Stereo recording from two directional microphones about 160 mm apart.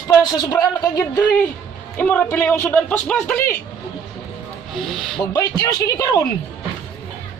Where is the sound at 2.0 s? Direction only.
10° left (ahead or behind).